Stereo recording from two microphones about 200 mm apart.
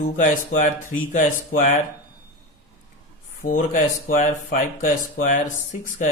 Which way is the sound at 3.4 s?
40° left (ahead or behind).